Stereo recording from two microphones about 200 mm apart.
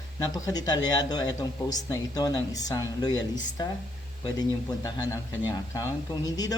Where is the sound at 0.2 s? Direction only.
20° left (ahead or behind).